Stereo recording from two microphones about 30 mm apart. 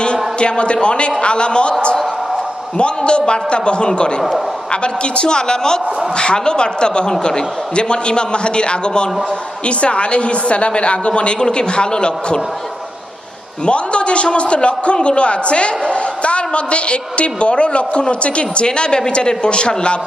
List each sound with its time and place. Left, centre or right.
0.0 s a man's voice: left
2.7 s a man's voice: left
13.7 s a man's voice: left